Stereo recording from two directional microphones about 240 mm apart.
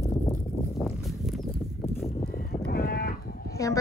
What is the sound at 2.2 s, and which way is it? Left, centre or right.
Livestock, left.